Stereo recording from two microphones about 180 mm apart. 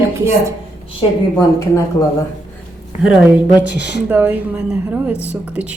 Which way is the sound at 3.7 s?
70° left (ahead or behind).